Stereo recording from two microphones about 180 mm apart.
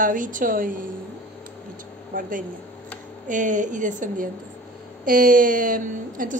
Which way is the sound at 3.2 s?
45° right (ahead or behind).